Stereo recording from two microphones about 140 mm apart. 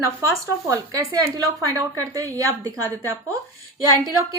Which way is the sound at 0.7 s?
25° right (ahead or behind).